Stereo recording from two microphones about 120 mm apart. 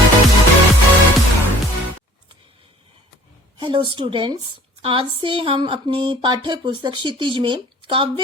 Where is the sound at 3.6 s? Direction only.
45° right (ahead or behind).